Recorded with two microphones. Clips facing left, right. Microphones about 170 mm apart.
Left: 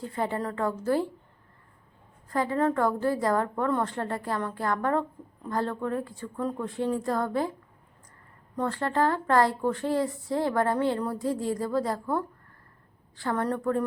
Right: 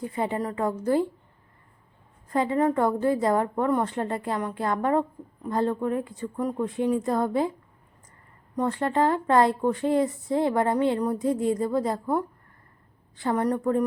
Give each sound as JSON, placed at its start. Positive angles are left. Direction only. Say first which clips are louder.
{"t": 0.0, "sound": "a woman's voice", "louder": "right 2 dB", "side_deg": -15}
{"t": 2.3, "sound": "a woman's voice", "louder": "right 3 dB", "side_deg": -20}
{"t": 8.5, "sound": "a woman's voice", "louder": "right 3 dB", "side_deg": -15}